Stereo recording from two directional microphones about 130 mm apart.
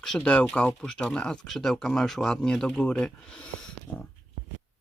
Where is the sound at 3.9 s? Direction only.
15° left (ahead or behind).